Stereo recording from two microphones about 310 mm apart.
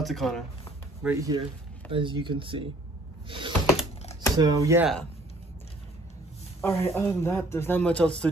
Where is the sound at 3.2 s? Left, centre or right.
Centre.